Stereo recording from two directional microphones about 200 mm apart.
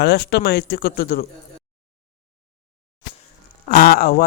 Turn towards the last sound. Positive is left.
turn(degrees=45)  # may be behind; listen again after turning